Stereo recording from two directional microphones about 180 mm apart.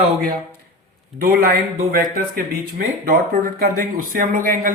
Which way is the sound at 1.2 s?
55° right (ahead or behind).